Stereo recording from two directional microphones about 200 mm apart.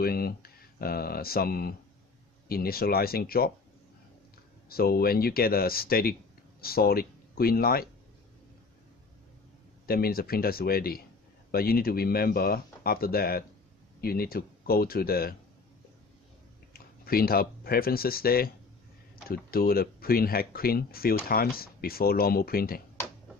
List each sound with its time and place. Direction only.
0.0 s speech: 50° left (ahead or behind)
4.6 s speech: 50° left (ahead or behind)
9.8 s speech: 50° left (ahead or behind)
16.7 s speech: 50° left (ahead or behind)